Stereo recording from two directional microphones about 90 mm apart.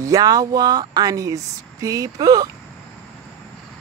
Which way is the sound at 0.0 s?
40° right (ahead or behind).